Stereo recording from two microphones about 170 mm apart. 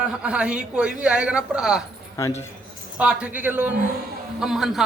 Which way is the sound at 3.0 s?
5° right (ahead or behind).